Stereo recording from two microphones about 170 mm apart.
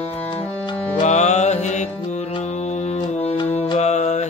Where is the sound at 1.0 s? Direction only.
45° left (ahead or behind).